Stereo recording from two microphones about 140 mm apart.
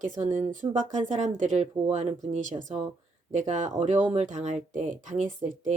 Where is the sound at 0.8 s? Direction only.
60° right (ahead or behind).